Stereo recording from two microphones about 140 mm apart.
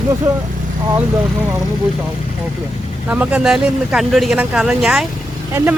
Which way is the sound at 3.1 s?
10° right (ahead or behind).